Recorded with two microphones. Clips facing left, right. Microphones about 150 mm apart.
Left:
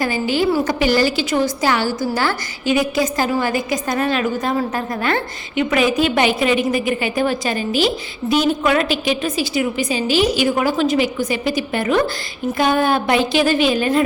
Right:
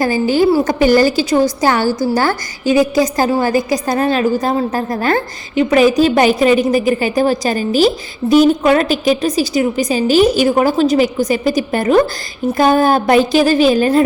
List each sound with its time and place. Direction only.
0.0 s a woman's voice: 45° right (ahead or behind)